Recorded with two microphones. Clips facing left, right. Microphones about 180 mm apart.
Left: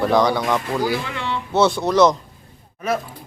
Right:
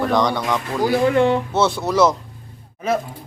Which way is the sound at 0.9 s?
50° right (ahead or behind).